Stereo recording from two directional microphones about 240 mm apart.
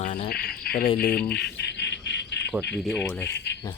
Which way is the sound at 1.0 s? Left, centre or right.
Left.